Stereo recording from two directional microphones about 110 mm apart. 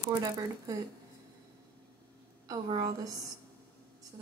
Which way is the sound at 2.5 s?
40° right (ahead or behind).